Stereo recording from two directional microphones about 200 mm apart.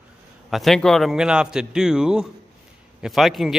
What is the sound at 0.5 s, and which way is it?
Speech, centre (ahead or behind).